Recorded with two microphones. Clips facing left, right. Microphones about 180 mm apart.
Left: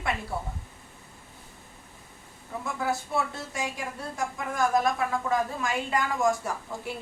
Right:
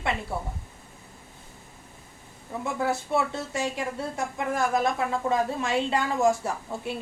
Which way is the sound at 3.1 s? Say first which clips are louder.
Right 4 dB; 25° right (ahead or behind).